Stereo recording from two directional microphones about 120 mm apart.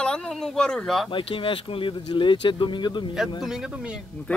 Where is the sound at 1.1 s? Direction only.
45° left (ahead or behind).